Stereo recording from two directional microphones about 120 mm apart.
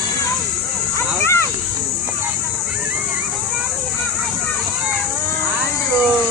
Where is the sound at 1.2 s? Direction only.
25° left (ahead or behind).